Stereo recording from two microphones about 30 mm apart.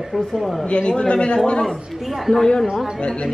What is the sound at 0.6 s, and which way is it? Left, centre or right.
A woman's voice, left.